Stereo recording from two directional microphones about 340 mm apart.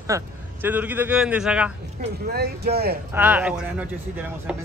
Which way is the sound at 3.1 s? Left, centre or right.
Centre.